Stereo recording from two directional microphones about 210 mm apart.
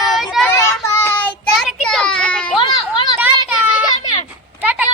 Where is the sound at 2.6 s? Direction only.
20° left (ahead or behind).